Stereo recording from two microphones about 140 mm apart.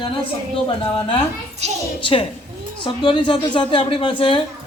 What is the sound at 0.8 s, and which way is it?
Speech, 40° left (ahead or behind).